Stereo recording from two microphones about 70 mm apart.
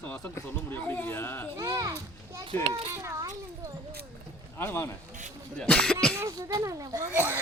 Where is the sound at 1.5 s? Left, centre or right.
Right.